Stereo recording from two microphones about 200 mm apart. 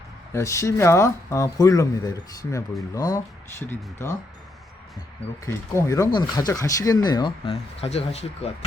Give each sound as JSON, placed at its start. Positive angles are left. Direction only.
{"t": 0.3, "sound": "speech", "side_deg": 15}
{"t": 5.5, "sound": "speech", "side_deg": 15}